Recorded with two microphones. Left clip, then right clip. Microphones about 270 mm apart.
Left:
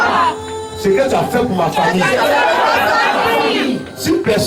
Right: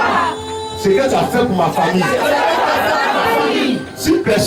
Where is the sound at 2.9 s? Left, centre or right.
Centre.